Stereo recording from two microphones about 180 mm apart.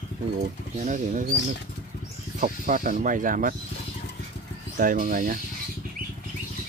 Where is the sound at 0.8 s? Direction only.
45° right (ahead or behind).